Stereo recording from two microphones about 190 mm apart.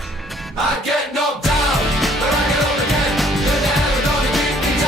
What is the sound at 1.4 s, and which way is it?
Music, centre (ahead or behind).